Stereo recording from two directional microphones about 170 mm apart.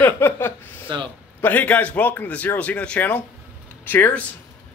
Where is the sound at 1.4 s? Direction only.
10° left (ahead or behind).